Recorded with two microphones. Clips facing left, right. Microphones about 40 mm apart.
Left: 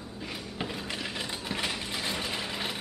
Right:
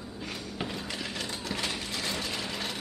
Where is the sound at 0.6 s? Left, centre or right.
Centre.